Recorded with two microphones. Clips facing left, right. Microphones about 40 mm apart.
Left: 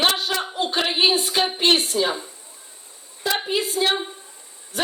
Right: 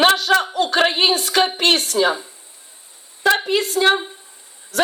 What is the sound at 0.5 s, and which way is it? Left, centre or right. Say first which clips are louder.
Speech: right 5 dB; right.